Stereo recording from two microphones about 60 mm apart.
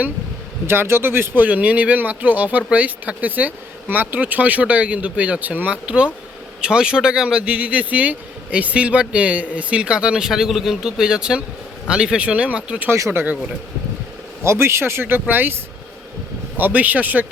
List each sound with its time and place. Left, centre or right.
0.7 s speech: right
1.5 s speech: right
13.1 s speech: right
14.4 s speech: right
16.6 s speech: right